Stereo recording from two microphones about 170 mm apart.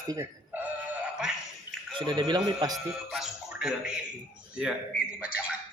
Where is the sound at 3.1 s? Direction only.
5° right (ahead or behind).